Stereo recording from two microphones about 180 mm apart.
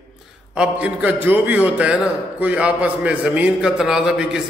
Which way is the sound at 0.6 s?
5° right (ahead or behind).